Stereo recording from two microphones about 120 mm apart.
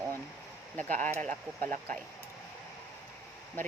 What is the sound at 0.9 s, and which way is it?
Speech, 90° right.